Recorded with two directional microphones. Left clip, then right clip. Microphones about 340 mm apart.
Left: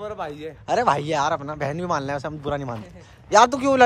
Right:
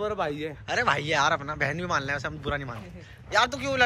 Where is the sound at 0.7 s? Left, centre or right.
Centre.